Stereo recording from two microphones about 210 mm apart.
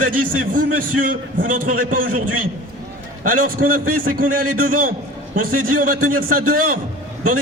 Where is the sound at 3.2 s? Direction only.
40° right (ahead or behind).